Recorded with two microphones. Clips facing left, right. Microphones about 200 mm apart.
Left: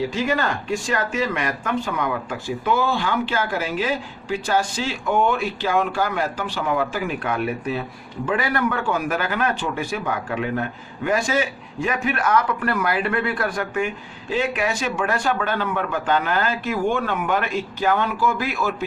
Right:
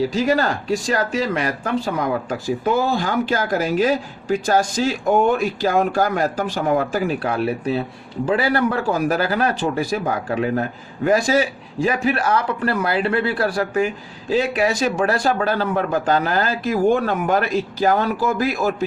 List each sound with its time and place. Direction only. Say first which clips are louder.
0.1 s speech: right 4 dB; 35° right (ahead or behind)